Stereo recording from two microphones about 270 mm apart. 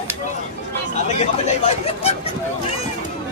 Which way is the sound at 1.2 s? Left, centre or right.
Left.